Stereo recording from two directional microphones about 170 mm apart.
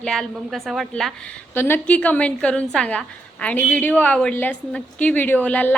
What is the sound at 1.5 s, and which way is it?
A woman's voice, 15° left (ahead or behind).